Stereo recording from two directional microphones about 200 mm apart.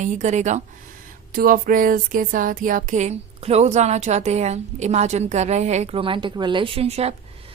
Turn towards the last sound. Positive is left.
turn(degrees=-30)  # may be behind; listen again after turning